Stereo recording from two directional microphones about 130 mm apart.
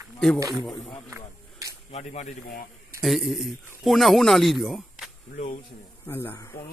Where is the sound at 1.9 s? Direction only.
60° left (ahead or behind).